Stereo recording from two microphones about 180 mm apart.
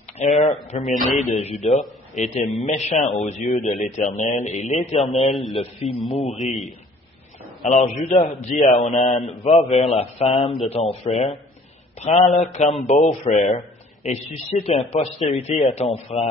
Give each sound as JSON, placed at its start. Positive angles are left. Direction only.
{"t": 0.2, "sound": "a man's voice", "side_deg": 35}
{"t": 5.3, "sound": "a man's voice", "side_deg": 0}
{"t": 5.6, "sound": "a man's voice", "side_deg": 35}
{"t": 7.6, "sound": "a man's voice", "side_deg": 40}
{"t": 12.0, "sound": "a man's voice", "side_deg": 40}